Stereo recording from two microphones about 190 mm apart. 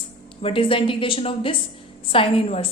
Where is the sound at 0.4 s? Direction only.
30° left (ahead or behind).